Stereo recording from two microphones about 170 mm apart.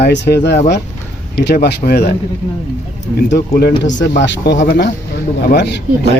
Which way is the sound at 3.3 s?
70° left (ahead or behind).